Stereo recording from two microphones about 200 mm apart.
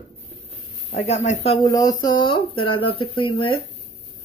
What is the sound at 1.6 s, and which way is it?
Speech, 15° left (ahead or behind).